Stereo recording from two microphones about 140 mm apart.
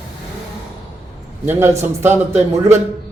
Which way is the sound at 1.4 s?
15° right (ahead or behind).